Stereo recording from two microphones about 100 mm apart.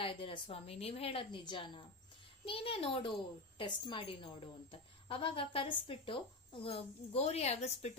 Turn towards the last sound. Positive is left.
turn(degrees=90)